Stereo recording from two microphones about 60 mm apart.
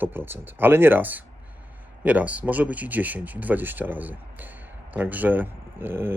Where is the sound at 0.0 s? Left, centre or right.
Right.